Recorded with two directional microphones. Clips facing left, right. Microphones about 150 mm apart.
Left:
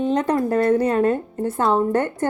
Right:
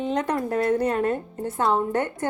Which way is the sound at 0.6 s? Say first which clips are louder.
Left 4 dB; 45° left (ahead or behind).